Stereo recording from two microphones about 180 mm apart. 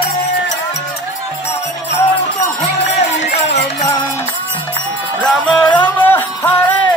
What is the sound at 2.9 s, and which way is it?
Music, 35° left (ahead or behind).